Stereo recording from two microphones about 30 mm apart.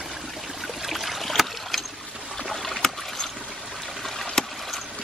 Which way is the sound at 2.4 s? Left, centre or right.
Centre.